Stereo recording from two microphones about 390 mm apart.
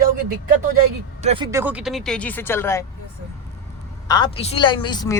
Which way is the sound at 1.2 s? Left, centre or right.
Centre.